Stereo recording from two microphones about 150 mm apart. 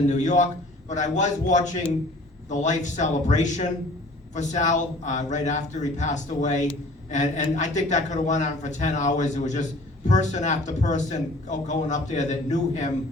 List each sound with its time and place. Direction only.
0.1 s a man's voice: 55° left (ahead or behind)